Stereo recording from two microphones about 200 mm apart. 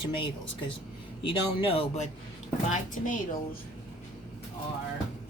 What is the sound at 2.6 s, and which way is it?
Speech, 40° left (ahead or behind).